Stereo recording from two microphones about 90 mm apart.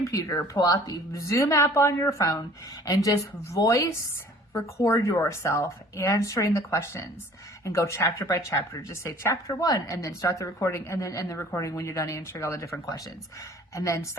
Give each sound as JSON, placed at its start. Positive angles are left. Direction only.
{"t": 0.1, "sound": "speech", "side_deg": 40}